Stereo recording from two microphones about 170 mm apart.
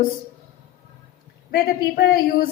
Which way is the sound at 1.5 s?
70° left (ahead or behind).